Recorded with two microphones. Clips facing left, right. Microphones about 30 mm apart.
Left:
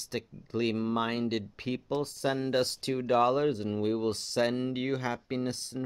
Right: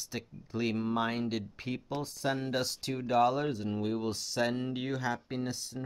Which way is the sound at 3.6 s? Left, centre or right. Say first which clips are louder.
Left 4 dB; left.